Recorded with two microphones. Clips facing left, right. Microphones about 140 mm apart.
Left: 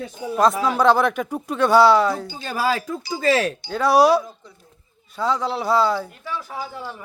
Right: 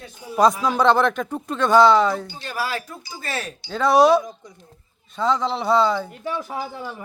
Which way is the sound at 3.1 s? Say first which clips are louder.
Left 11 dB; 90° left.